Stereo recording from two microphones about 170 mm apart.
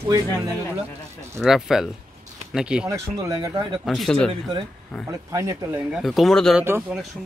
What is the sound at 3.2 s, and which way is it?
Speech, 20° right (ahead or behind).